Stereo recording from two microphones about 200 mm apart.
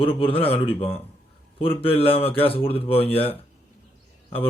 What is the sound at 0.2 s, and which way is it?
Speech, 30° left (ahead or behind).